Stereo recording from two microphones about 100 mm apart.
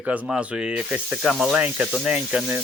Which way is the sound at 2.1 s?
15° right (ahead or behind).